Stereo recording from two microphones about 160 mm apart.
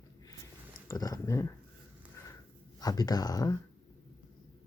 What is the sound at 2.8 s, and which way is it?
Speech, 25° left (ahead or behind).